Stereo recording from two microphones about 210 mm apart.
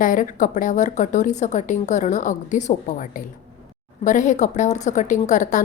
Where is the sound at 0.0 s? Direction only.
40° left (ahead or behind).